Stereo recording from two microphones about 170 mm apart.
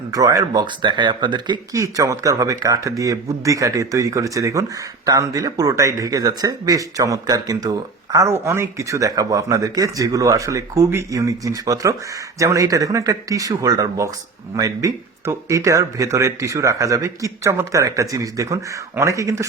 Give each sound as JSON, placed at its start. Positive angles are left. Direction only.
{"t": 0.1, "sound": "speech", "side_deg": -20}